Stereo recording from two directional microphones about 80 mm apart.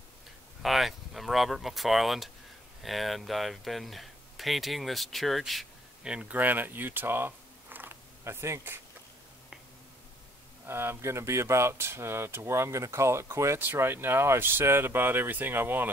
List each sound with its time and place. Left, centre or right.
0.6 s speech: centre
6.0 s speech: centre
6.3 s speech: right
10.7 s speech: right